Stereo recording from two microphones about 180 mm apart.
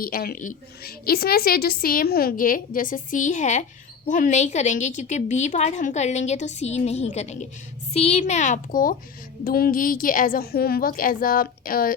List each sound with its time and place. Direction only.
0.0 s a woman's voice: 55° left (ahead or behind)